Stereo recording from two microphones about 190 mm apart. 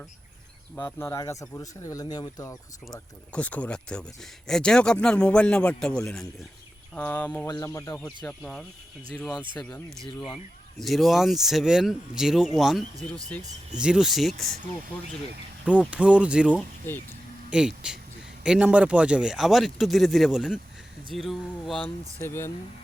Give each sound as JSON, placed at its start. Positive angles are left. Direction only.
{"t": 0.8, "sound": "speech", "side_deg": 10}
{"t": 2.9, "sound": "speech", "side_deg": 5}
{"t": 9.6, "sound": "speech", "side_deg": 5}
{"t": 10.1, "sound": "speech", "side_deg": 25}
{"t": 10.3, "sound": "speech", "side_deg": 0}
{"t": 15.6, "sound": "speech", "side_deg": -5}
{"t": 16.9, "sound": "speech", "side_deg": 10}
{"t": 17.5, "sound": "speech", "side_deg": -5}
{"t": 22.2, "sound": "speech", "side_deg": 15}